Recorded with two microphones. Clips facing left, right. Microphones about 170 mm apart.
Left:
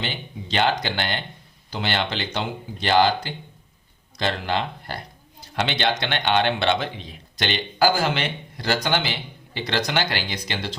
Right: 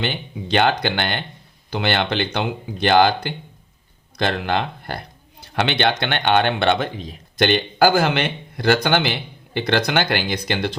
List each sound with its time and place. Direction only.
0.0 s a man's voice: 60° right (ahead or behind)